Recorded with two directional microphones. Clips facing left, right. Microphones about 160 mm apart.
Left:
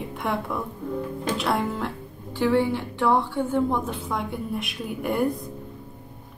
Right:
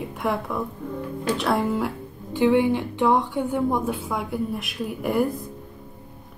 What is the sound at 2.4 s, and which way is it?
A woman's voice, 15° right (ahead or behind).